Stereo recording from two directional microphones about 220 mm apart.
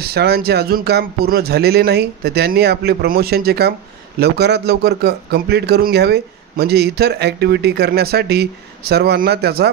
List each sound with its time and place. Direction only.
0.0 s speech: 45° right (ahead or behind)